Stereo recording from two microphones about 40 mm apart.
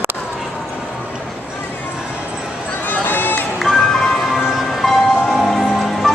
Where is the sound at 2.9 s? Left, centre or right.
Left.